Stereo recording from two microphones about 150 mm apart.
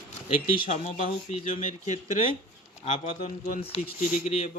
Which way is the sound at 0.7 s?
45° left (ahead or behind).